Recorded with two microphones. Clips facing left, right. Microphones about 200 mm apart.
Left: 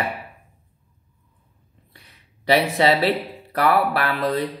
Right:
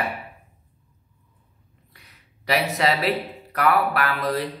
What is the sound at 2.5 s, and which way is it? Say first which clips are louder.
Speech: left 4 dB; 30° left (ahead or behind).